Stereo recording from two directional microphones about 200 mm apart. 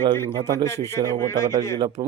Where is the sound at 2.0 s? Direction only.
20° right (ahead or behind).